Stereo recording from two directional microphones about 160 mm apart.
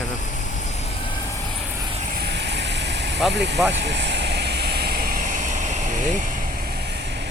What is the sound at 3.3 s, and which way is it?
Speech, 90° right.